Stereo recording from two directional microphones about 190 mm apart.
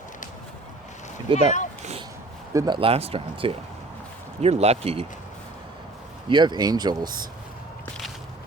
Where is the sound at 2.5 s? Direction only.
20° right (ahead or behind).